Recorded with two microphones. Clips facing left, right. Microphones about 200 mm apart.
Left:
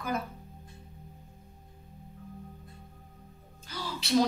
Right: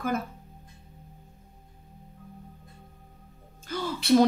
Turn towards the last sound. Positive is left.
turn(degrees=-55)  # may be behind; listen again after turning